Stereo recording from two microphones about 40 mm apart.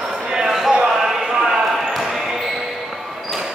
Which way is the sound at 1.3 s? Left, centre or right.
Centre.